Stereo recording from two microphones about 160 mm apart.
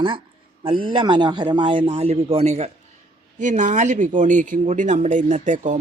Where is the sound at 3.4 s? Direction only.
50° right (ahead or behind).